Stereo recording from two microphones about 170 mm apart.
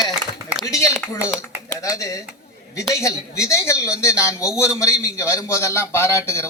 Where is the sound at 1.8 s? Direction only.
20° left (ahead or behind).